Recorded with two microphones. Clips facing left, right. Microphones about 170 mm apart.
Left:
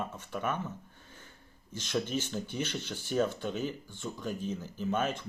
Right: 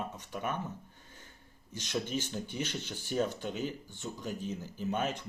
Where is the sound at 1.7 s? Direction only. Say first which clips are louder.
Left 2 dB; 15° right (ahead or behind).